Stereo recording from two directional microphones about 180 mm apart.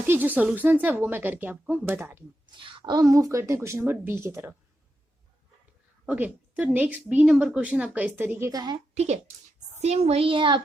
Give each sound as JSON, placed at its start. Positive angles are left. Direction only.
{"t": 0.1, "sound": "a woman's voice", "side_deg": -10}
{"t": 2.5, "sound": "a woman's voice", "side_deg": -30}
{"t": 6.1, "sound": "a woman's voice", "side_deg": -10}
{"t": 9.0, "sound": "a child's voice", "side_deg": -40}